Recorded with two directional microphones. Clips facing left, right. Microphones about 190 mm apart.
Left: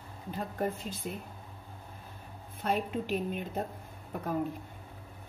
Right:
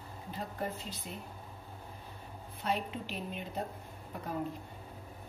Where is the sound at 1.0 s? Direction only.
55° left (ahead or behind).